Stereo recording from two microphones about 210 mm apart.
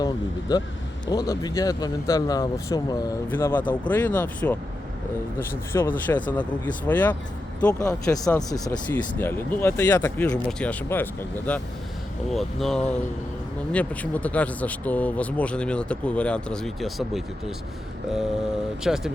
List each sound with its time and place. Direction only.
0.0 s speech: 20° left (ahead or behind); by 17.2 s centre (ahead or behind)
18.8 s speech: centre (ahead or behind)